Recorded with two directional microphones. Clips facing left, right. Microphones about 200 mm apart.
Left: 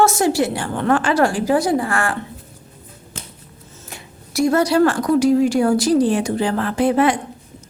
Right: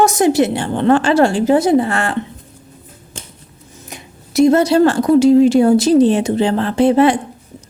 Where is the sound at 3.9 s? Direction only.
20° right (ahead or behind).